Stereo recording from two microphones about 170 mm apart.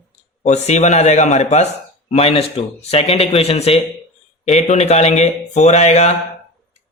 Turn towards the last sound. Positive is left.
turn(degrees=40)  # may be behind; listen again after turning